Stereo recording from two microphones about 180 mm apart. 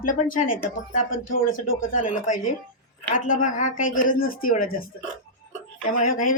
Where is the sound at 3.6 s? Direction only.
50° left (ahead or behind).